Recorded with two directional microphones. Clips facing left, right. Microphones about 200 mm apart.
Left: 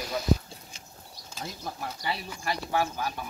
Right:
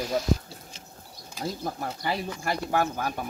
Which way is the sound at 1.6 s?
50° right (ahead or behind).